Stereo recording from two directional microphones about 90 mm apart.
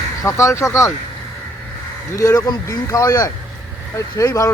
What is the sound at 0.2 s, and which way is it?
Speech, 35° left (ahead or behind).